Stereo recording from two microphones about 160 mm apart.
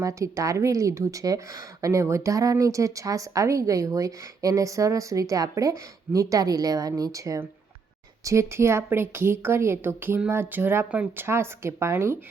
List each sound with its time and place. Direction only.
0.0 s a woman's voice: 20° right (ahead or behind)